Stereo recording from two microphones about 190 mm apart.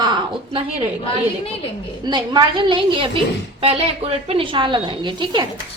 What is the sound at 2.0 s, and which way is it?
A woman's voice, 25° right (ahead or behind).